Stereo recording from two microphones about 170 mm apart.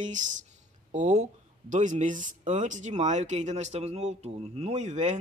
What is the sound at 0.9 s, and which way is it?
Speech, 45° right (ahead or behind).